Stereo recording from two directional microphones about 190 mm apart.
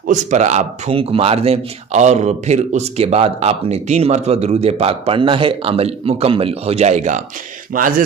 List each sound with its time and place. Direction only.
0.1 s speech: 40° right (ahead or behind)